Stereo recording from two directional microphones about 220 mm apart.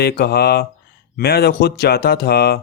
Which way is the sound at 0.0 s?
45° left (ahead or behind).